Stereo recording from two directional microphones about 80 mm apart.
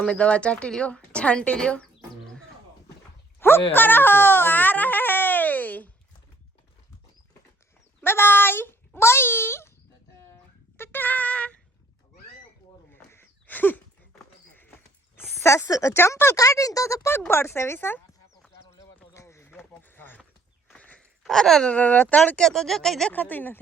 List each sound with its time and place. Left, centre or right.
0.0 s speech: centre
3.7 s baby cry: left
8.0 s a child's voice: left
10.8 s a sound: left
12.9 s a sound: left
14.5 s speech: left
18.5 s a sound: left
19.7 s a sound: left
20.7 s walk: centre
21.2 s speech: centre
22.4 s speech: centre
23.1 s a child's voice: left